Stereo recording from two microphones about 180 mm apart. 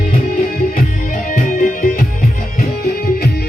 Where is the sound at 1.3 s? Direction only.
50° left (ahead or behind).